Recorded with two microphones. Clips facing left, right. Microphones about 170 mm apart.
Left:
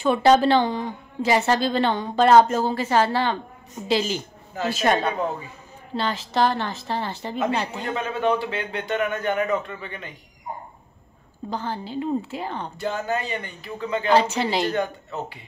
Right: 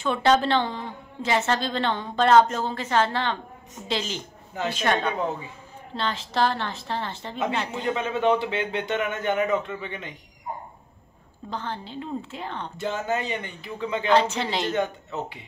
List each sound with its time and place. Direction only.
0.0 s a woman's voice: 10° left (ahead or behind)
7.9 s a man's voice: 20° right (ahead or behind)
11.5 s a woman's voice: 5° left (ahead or behind)
12.7 s a man's voice: 20° right (ahead or behind)
14.3 s a woman's voice: 5° left (ahead or behind)
14.7 s a man's voice: 20° right (ahead or behind)